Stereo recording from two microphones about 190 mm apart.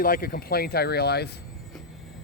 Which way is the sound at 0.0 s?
50° left (ahead or behind).